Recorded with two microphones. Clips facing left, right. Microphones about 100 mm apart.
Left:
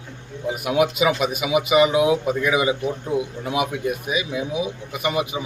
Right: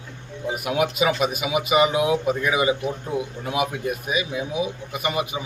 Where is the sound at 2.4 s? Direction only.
35° right (ahead or behind).